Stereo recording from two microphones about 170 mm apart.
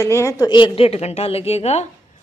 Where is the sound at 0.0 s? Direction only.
15° left (ahead or behind).